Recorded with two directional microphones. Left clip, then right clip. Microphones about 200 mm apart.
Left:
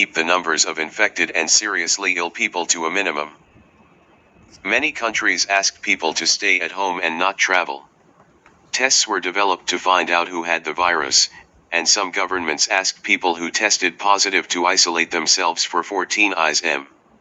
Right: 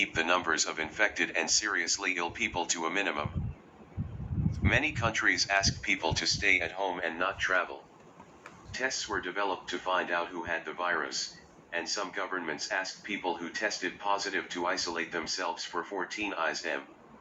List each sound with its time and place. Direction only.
0.0 s speech: 45° left (ahead or behind)
4.6 s speech: 45° left (ahead or behind)